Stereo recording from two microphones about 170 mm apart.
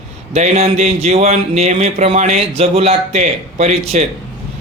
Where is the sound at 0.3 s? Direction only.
40° right (ahead or behind).